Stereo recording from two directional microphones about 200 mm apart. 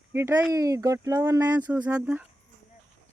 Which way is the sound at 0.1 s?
15° right (ahead or behind).